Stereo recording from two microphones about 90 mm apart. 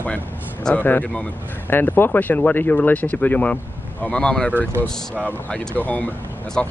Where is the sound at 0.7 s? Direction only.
20° left (ahead or behind).